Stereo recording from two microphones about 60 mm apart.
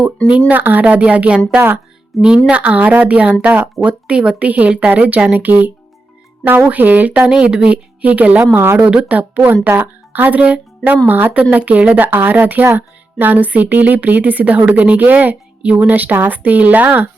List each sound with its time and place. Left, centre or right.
0.3 s speech: right
2.1 s speech: centre
2.5 s speech: right
7.3 s speech: centre
8.5 s speech: right
9.0 s speech: right